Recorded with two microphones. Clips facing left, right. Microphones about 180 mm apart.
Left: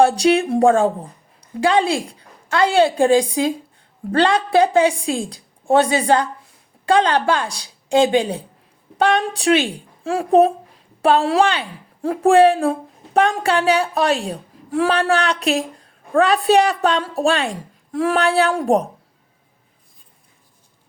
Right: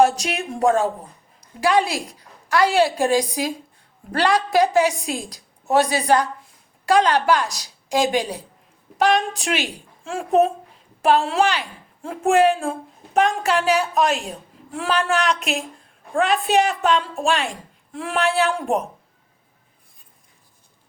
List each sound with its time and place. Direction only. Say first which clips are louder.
0.0 s a woman's voice: left 4 dB; 30° left (ahead or behind)